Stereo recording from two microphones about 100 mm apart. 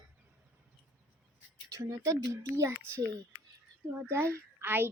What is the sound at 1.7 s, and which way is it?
Speech, 35° right (ahead or behind).